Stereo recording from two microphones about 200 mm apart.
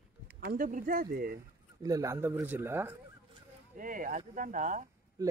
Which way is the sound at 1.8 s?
15° right (ahead or behind).